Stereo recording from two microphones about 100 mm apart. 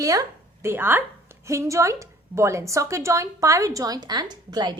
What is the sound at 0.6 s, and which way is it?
A woman's voice, 20° right (ahead or behind).